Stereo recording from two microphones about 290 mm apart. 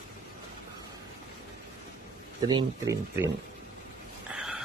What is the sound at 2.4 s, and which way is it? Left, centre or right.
Speech, centre.